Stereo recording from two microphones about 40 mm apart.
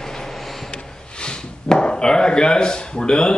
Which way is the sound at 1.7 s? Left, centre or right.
Left.